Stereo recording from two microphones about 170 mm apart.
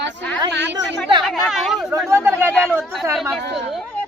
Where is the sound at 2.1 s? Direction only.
15° right (ahead or behind).